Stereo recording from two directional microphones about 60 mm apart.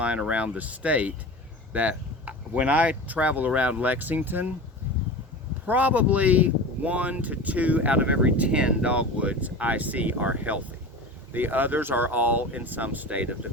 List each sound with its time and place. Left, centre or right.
0.0 s speech: centre
5.6 s speech: right